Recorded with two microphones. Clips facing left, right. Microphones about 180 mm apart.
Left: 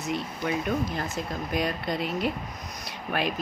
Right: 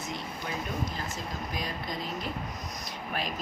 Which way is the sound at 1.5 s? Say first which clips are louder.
Left 10 dB; 65° left (ahead or behind).